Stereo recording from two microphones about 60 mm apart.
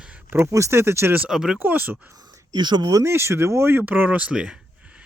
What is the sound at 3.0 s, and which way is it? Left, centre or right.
Speech, right.